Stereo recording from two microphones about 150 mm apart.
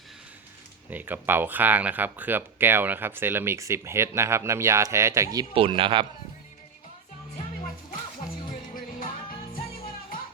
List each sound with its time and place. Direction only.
0.9 s speech: 10° right (ahead or behind)
5.5 s speech: 35° right (ahead or behind)